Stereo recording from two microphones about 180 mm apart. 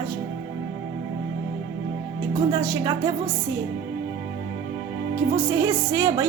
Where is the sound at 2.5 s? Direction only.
15° right (ahead or behind).